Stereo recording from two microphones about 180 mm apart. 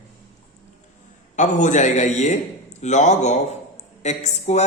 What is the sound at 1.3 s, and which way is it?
A man's voice, 45° left (ahead or behind).